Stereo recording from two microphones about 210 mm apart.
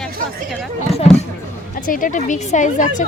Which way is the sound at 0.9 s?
30° left (ahead or behind).